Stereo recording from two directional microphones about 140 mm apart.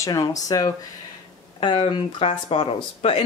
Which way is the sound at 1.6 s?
40° left (ahead or behind).